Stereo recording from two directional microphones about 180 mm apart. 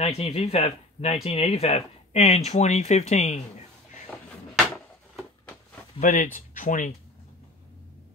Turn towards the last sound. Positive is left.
turn(degrees=45)  # may be behind; listen again after turning